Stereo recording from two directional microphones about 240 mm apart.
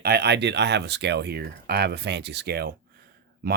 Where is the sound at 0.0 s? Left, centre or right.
Right.